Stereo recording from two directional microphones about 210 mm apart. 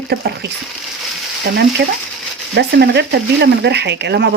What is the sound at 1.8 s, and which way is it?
Speech, 50° right (ahead or behind).